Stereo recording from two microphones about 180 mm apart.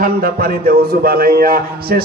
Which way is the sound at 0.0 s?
55° right (ahead or behind).